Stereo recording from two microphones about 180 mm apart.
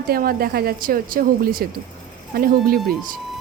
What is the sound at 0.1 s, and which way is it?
Speech, 55° right (ahead or behind).